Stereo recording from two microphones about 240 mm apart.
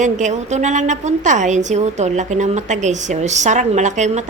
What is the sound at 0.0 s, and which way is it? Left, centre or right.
A woman's voice, right.